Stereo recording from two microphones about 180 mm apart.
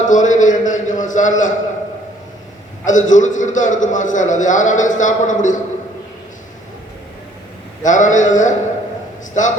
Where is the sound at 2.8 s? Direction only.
45° left (ahead or behind).